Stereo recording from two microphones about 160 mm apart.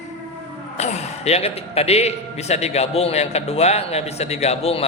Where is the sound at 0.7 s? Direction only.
45° left (ahead or behind).